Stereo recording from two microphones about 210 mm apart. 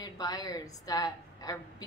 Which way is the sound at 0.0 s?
15° left (ahead or behind).